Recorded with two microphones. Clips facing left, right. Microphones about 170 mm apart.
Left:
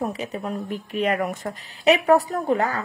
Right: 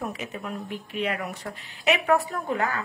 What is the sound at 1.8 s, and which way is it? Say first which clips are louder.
A woman's voice: left 5 dB; 35° left (ahead or behind).